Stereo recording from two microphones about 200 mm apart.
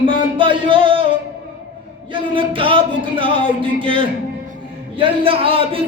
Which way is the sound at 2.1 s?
25° right (ahead or behind).